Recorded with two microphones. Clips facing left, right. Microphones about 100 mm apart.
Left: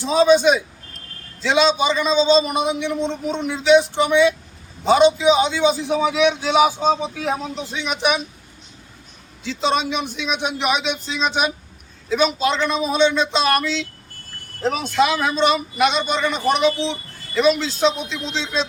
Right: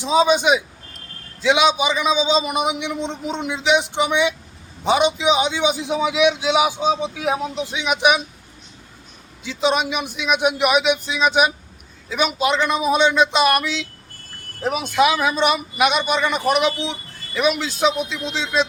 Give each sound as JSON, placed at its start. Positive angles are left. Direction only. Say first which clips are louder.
{"t": 0.0, "sound": "a man's voice", "louder": "left 2 dB", "side_deg": -15}
{"t": 9.4, "sound": "a man's voice", "louder": "right 1 dB", "side_deg": -10}